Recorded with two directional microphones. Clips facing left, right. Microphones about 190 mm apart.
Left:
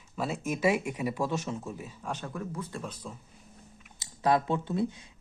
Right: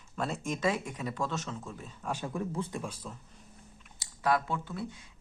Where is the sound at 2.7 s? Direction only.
10° right (ahead or behind).